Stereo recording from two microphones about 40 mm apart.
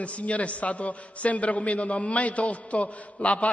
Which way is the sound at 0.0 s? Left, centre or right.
Left.